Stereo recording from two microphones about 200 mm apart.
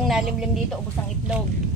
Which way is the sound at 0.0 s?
Centre (ahead or behind).